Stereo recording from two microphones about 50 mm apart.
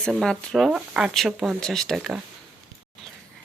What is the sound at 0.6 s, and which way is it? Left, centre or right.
Speech, centre.